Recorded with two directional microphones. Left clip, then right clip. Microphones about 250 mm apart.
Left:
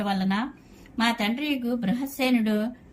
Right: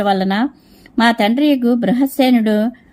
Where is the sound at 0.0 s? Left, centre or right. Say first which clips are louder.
Right 12 dB; centre.